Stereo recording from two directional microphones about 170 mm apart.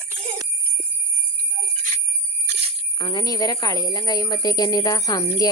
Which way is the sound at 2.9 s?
25° left (ahead or behind).